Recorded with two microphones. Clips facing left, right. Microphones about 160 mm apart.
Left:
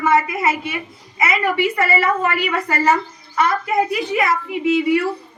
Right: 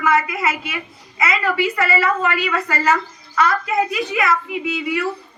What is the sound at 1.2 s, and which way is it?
A child's voice, 25° left (ahead or behind).